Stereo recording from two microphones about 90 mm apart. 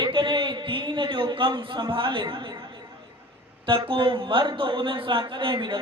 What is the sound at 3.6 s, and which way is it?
A man's voice, 70° right (ahead or behind).